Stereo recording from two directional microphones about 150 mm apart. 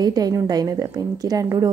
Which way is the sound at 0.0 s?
25° right (ahead or behind).